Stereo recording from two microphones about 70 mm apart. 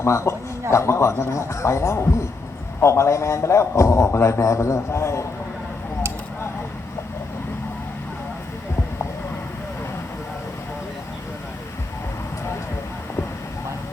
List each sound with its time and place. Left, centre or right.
0.0 s a man's voice: left